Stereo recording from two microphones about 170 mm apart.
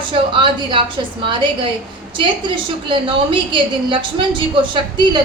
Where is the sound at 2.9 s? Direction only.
30° right (ahead or behind).